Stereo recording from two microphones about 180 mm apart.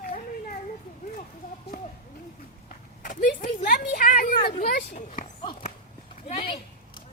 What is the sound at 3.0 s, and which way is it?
Vehicle, 45° left (ahead or behind).